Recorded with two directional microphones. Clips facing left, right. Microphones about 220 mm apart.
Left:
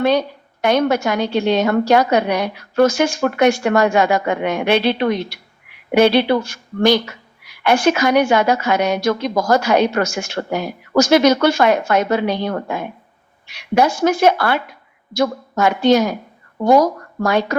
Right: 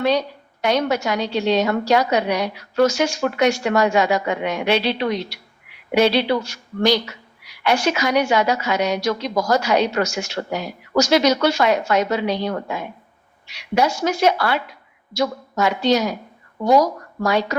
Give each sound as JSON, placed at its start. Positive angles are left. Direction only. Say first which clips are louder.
{"t": 0.0, "sound": "a woman's voice", "louder": "left 3 dB", "side_deg": 55}